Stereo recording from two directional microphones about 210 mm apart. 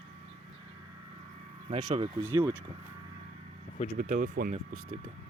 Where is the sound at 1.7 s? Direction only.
25° right (ahead or behind).